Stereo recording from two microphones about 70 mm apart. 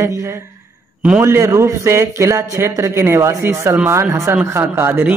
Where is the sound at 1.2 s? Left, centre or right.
Right.